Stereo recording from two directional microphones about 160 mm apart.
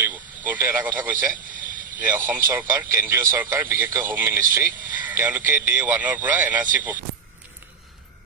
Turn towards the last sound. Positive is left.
turn(degrees=-10)  # may be behind; listen again after turning